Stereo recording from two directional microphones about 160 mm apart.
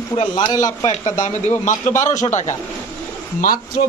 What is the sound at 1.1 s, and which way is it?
A man's voice, 50° left (ahead or behind).